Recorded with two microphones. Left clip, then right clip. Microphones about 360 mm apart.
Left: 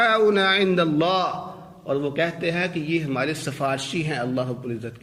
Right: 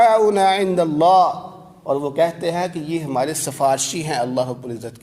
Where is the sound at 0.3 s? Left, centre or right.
Centre.